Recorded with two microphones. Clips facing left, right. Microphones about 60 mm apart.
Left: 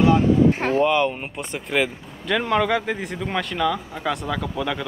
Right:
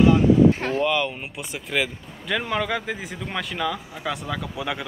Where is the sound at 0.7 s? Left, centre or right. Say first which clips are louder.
Left 4 dB; centre.